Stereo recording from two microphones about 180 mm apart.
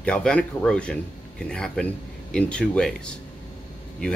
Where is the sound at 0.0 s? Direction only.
5° left (ahead or behind).